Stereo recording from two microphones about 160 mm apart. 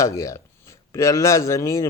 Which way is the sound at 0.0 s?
20° left (ahead or behind).